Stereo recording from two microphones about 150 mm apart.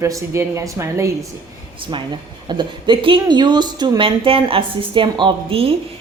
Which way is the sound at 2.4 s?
35° right (ahead or behind).